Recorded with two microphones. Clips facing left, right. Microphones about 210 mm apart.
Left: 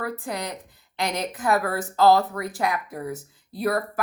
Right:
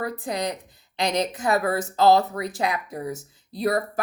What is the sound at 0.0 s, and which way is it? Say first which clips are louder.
A woman's voice: right 3 dB; 20° right (ahead or behind).